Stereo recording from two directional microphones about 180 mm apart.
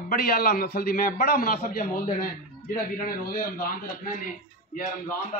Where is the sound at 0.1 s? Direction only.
55° left (ahead or behind).